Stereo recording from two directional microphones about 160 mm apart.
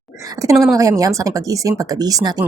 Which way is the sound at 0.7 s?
20° right (ahead or behind).